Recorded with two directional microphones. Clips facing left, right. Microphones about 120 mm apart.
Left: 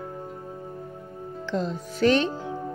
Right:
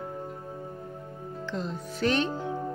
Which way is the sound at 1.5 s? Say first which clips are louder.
Left 6 dB; 90° left.